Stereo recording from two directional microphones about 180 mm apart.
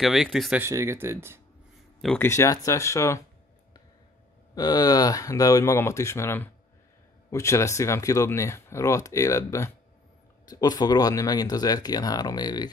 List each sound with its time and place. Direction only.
0.0 s speech: centre (ahead or behind)
2.1 s speech: 15° left (ahead or behind)
4.6 s speech: 20° left (ahead or behind)